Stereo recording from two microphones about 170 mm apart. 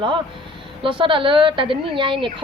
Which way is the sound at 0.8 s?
30° right (ahead or behind).